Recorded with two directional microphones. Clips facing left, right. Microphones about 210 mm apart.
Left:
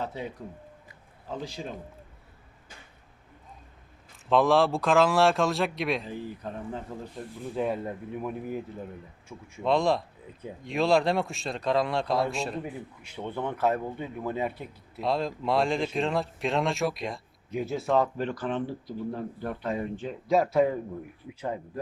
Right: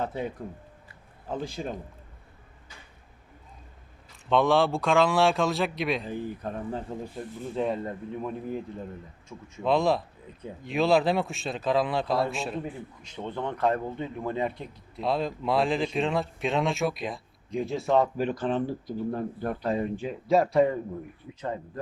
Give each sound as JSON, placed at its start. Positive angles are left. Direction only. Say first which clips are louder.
{"t": 0.0, "sound": "speech", "louder": "right 3 dB", "side_deg": -50}
{"t": 1.3, "sound": "speech", "louder": "right 3 dB", "side_deg": -50}
{"t": 4.3, "sound": "speech", "louder": "even", "side_deg": 0}
{"t": 6.1, "sound": "speech", "louder": "right 3 dB", "side_deg": -50}
{"t": 7.2, "sound": "speech", "louder": "even", "side_deg": 5}
{"t": 18.3, "sound": "speech", "louder": "right 3 dB", "side_deg": -35}
{"t": 19.6, "sound": "speech", "louder": "right 3 dB", "side_deg": -30}
{"t": 20.0, "sound": "speech", "louder": "even", "side_deg": -5}